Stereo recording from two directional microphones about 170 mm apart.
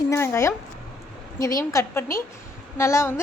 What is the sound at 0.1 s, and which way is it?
A woman's voice, 15° left (ahead or behind).